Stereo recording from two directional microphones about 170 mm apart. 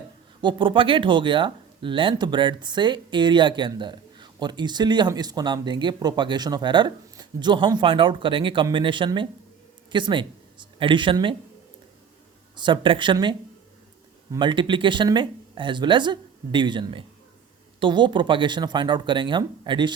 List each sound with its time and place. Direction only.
0.4 s speech: 30° right (ahead or behind)
12.5 s speech: 25° right (ahead or behind)
14.3 s speech: 30° right (ahead or behind)